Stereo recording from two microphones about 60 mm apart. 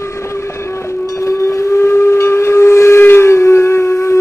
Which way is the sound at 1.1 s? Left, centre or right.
Left.